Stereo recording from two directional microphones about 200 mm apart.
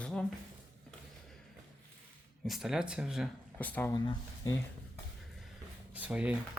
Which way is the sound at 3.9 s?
20° left (ahead or behind).